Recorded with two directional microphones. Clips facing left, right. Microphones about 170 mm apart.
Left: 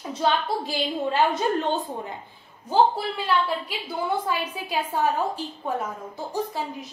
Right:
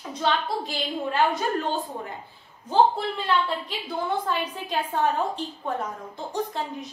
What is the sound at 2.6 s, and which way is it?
A woman's voice, 10° left (ahead or behind).